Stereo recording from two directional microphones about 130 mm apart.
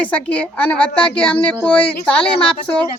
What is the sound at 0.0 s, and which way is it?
Speech, 10° left (ahead or behind).